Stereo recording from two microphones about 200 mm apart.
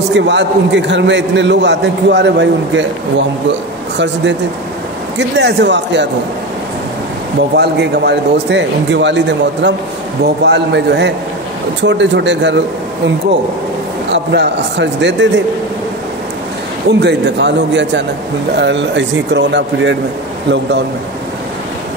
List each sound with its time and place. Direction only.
0.1 s a man's voice: 60° right (ahead or behind)
5.4 s a man's voice: 60° right (ahead or behind)
7.5 s a man's voice: 55° right (ahead or behind)
14.1 s a man's voice: 60° right (ahead or behind)
17.0 s a man's voice: 60° right (ahead or behind)